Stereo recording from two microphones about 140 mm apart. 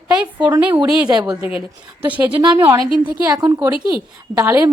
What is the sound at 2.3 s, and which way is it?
Speech, 30° right (ahead or behind).